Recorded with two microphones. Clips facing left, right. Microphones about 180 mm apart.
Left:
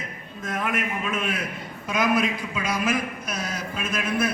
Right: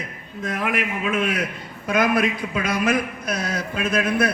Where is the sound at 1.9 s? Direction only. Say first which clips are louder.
Right 3 dB; 55° right (ahead or behind).